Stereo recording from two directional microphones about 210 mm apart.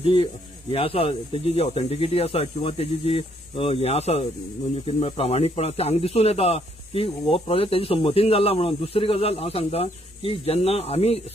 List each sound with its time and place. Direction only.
0.0 s speech: 25° left (ahead or behind)